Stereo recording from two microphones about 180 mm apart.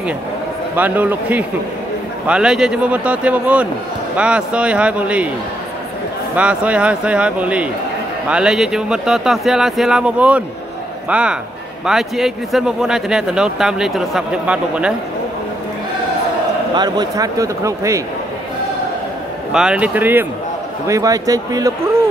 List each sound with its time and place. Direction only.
0.7 s speech: 10° right (ahead or behind)
6.3 s speech: 5° right (ahead or behind)
16.7 s a man's voice: 25° right (ahead or behind)
19.5 s a man's voice: 5° right (ahead or behind)